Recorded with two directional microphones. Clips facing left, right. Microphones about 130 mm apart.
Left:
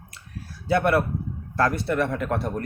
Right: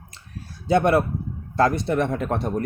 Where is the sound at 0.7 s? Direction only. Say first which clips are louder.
Right 3 dB; 20° right (ahead or behind).